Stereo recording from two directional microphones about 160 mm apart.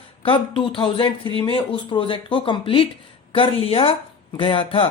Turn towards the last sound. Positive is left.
turn(degrees=35)  # may be behind; listen again after turning